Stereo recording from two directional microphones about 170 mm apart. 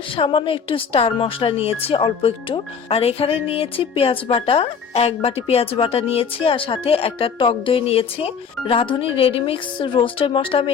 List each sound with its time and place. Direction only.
0.2 s a woman's voice: 30° left (ahead or behind)